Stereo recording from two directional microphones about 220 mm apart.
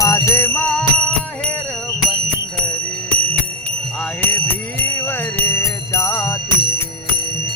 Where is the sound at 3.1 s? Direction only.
5° left (ahead or behind).